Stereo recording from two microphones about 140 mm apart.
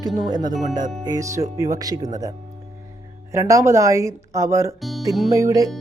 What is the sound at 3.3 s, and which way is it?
Speech, 20° right (ahead or behind).